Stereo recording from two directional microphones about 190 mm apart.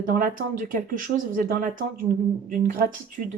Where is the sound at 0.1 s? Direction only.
45° right (ahead or behind).